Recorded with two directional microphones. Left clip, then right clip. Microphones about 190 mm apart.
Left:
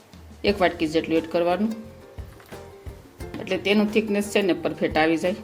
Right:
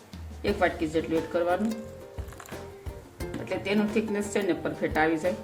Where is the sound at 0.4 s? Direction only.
45° left (ahead or behind).